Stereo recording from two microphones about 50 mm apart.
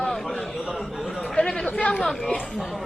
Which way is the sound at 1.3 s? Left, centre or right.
Centre.